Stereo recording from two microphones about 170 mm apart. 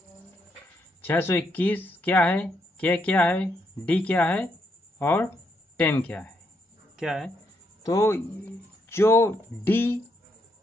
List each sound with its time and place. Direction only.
1.0 s speech: 15° left (ahead or behind); by 7.2 s centre (ahead or behind)
7.8 s speech: 20° left (ahead or behind)